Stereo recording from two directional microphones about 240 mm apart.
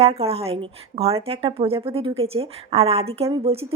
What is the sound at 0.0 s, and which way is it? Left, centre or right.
Speech, right.